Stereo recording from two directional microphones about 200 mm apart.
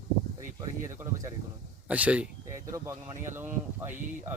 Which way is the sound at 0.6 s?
15° right (ahead or behind).